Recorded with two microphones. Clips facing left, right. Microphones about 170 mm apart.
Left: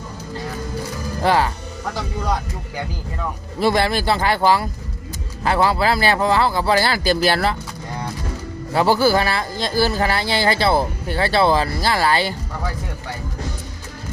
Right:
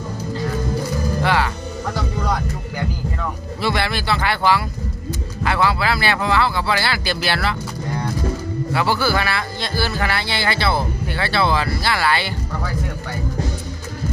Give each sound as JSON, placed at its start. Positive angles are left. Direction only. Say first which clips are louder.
{"t": 1.2, "sound": "music", "louder": "left 3 dB", "side_deg": 40}
{"t": 3.6, "sound": "a man's voice", "louder": "left 4 dB", "side_deg": 40}
{"t": 8.7, "sound": "a man's voice", "louder": "left 4 dB", "side_deg": 40}